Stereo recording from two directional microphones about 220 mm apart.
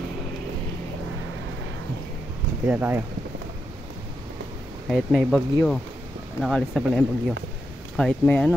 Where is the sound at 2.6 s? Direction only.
10° right (ahead or behind).